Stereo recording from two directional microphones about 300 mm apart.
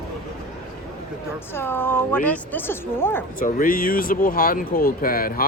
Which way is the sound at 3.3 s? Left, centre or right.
Left.